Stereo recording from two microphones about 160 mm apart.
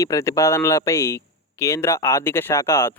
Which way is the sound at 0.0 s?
20° left (ahead or behind).